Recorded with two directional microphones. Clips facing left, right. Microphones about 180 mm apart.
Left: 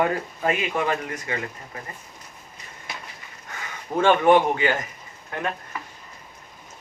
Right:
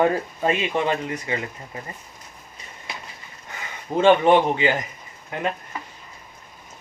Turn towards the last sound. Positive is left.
turn(degrees=-20)  # may be behind; listen again after turning